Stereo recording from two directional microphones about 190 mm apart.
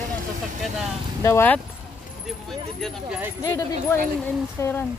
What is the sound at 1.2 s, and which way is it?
Speech, 10° left (ahead or behind).